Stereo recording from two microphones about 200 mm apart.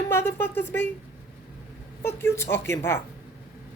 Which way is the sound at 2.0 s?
10° left (ahead or behind).